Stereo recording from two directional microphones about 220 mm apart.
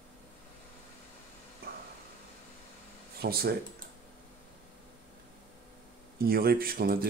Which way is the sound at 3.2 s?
45° right (ahead or behind).